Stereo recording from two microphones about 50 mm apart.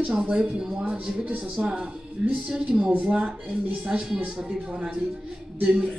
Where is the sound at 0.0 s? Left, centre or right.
Centre.